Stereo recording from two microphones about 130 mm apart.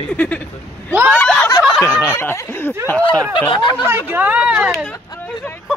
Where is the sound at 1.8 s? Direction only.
20° left (ahead or behind).